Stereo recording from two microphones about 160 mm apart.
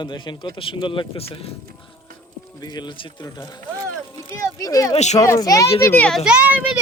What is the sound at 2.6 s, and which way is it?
Speech, 25° left (ahead or behind).